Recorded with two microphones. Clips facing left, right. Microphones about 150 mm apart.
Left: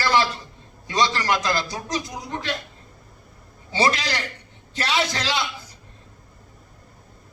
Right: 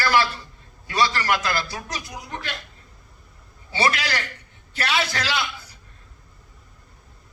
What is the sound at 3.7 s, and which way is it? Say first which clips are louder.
A man's voice: left 1 dB; 20° left (ahead or behind).